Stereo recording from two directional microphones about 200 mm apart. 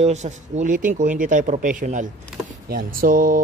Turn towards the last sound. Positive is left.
turn(degrees=-45)  # may be behind; listen again after turning